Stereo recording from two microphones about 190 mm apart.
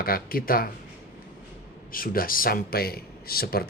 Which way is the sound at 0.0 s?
50° left (ahead or behind).